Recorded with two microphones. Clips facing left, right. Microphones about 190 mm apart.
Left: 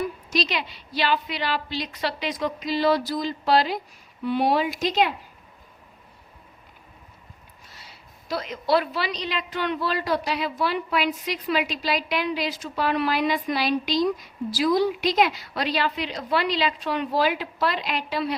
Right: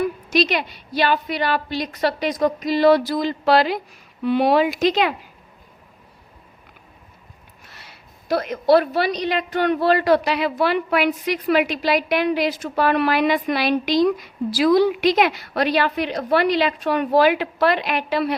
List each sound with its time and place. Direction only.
0.0 s a woman's voice: 60° right (ahead or behind); by 5.1 s 85° right
7.7 s a woman's voice: 65° right (ahead or behind)